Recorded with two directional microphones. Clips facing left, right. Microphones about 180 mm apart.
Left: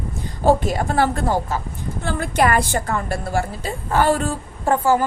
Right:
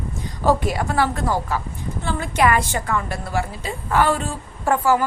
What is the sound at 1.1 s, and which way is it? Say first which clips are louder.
Speech: left 2 dB; 25° left (ahead or behind).